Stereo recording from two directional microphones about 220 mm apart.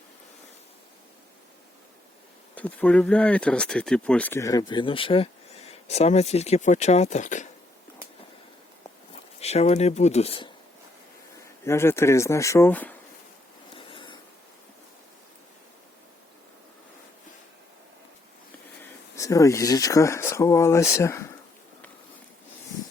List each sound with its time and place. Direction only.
2.6 s speech: 5° left (ahead or behind); by 7.4 s 35° left (ahead or behind)
9.4 s speech: 30° left (ahead or behind)
11.6 s speech: 10° left (ahead or behind)
13.7 s filing: 25° left (ahead or behind)
19.1 s speech: 15° left (ahead or behind)